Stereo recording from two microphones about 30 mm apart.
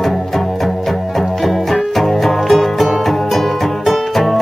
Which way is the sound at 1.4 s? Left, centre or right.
Centre.